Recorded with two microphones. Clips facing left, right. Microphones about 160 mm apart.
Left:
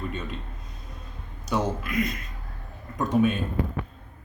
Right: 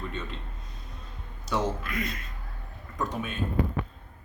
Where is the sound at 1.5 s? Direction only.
10° left (ahead or behind).